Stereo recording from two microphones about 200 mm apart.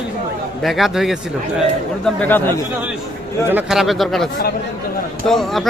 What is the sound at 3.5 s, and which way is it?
Speech, 5° right (ahead or behind).